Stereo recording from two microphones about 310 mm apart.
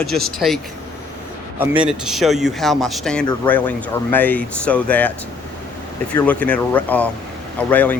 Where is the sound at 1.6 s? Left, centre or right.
Centre.